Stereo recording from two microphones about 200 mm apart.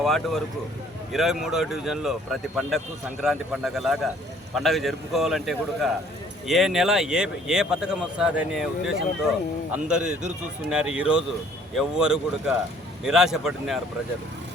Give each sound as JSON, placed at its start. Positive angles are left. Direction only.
{"t": 0.0, "sound": "speech", "side_deg": 0}